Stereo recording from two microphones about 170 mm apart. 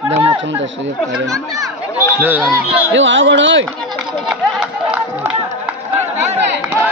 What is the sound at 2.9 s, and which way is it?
Speech, 90° right.